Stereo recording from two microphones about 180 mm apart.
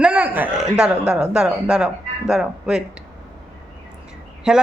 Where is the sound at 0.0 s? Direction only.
10° right (ahead or behind).